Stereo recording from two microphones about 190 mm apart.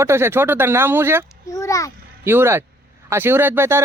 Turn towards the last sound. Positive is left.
turn(degrees=-15)  # may be behind; listen again after turning